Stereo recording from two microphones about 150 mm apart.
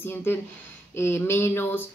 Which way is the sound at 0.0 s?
15° left (ahead or behind).